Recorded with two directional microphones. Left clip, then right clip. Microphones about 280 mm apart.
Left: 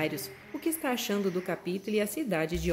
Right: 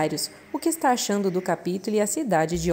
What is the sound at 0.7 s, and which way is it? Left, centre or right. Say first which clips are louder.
Speech: right 8 dB; right.